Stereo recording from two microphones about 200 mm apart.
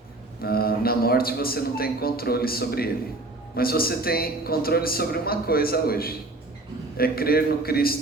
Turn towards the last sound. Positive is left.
turn(degrees=50)  # may be behind; listen again after turning